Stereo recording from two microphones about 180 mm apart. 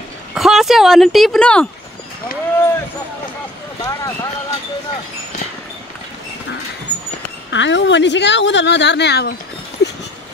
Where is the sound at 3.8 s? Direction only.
20° left (ahead or behind).